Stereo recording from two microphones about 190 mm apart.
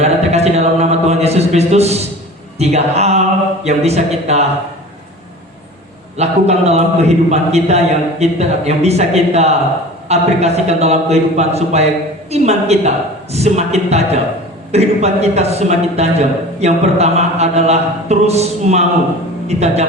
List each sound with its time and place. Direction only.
0.0 s a sound: 35° right (ahead or behind)
2.6 s a man's voice: 35° right (ahead or behind)
6.1 s a man's voice: 35° right (ahead or behind)